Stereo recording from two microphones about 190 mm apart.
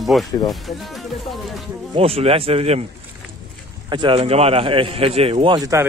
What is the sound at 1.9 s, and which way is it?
Speech, 30° right (ahead or behind).